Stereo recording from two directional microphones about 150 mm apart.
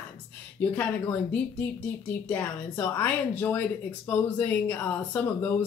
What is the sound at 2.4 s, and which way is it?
Speech, 25° left (ahead or behind).